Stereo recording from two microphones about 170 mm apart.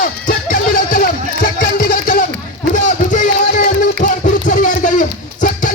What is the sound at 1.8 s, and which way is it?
Music, 55° left (ahead or behind).